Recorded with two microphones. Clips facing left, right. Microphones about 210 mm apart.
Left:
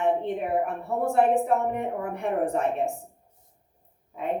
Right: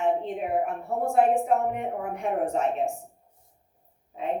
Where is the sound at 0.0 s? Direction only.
60° left (ahead or behind).